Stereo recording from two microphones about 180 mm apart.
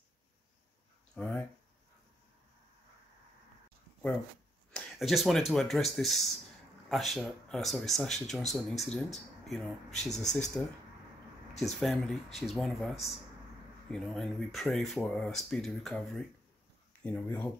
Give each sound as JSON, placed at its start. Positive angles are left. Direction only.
{"t": 1.1, "sound": "speech", "side_deg": 5}
{"t": 4.7, "sound": "speech", "side_deg": 0}
{"t": 11.6, "sound": "speech", "side_deg": 0}